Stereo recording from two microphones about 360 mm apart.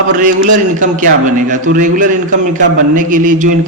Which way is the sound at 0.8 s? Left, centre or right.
Right.